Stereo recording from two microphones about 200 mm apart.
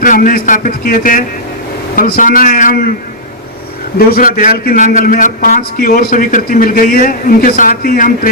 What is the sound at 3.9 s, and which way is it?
A man's voice, 45° left (ahead or behind).